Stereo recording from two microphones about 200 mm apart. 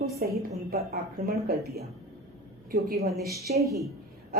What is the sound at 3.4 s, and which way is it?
Speech, 15° right (ahead or behind).